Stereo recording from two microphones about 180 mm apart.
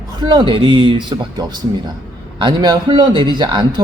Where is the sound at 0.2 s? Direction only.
25° right (ahead or behind).